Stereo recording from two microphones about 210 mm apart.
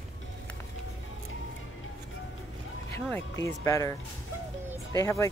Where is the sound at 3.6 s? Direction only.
15° left (ahead or behind).